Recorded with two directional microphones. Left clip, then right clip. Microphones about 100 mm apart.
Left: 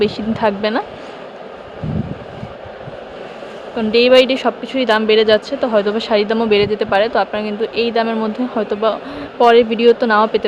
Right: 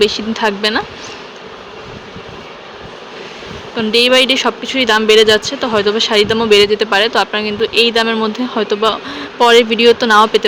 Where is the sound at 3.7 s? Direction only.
15° left (ahead or behind).